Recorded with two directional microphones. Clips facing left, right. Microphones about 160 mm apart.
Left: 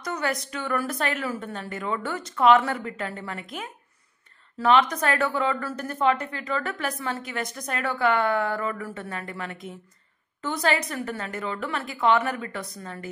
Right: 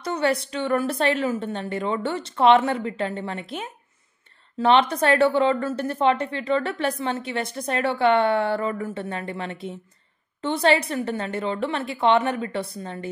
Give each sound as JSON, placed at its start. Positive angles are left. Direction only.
{"t": 0.0, "sound": "a woman's voice", "side_deg": -30}